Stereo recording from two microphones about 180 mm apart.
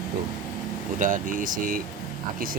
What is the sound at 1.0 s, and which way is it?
Speech, 50° right (ahead or behind).